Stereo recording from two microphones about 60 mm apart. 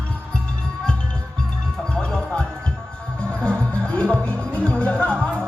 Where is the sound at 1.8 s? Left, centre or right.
Centre.